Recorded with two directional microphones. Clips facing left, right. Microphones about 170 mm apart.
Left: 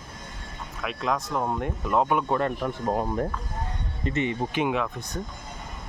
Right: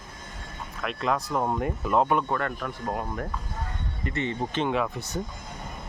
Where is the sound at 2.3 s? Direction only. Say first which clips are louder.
Left 4 dB; 20° left (ahead or behind).